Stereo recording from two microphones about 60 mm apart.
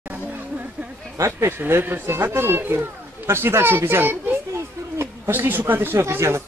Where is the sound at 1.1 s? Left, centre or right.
Right.